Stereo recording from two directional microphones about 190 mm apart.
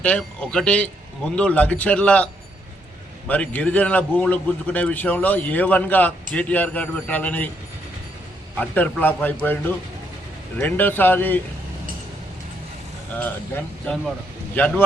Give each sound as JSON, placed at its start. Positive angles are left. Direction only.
{"t": 0.0, "sound": "a man's voice", "side_deg": 5}
{"t": 8.5, "sound": "a man's voice", "side_deg": 10}
{"t": 13.8, "sound": "speech", "side_deg": 0}